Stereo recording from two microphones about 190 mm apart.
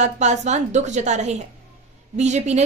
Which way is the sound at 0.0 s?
40° right (ahead or behind).